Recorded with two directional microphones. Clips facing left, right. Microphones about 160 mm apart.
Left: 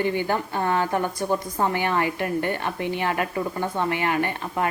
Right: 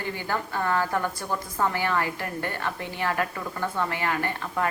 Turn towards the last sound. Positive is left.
turn(degrees=20)  # may be behind; listen again after turning